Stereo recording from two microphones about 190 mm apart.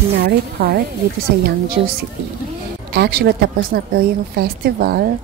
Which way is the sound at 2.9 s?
60° right (ahead or behind).